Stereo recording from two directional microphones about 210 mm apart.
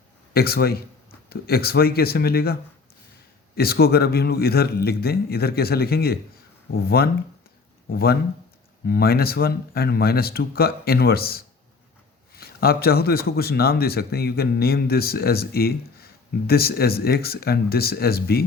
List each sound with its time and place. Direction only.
0.3 s speech: 45° left (ahead or behind)